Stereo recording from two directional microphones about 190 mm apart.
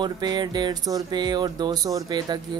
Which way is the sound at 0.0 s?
20° right (ahead or behind).